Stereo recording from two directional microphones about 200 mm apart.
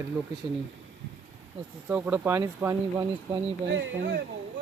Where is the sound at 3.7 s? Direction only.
65° right (ahead or behind).